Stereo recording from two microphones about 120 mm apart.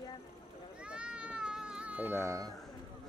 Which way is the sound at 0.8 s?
10° right (ahead or behind).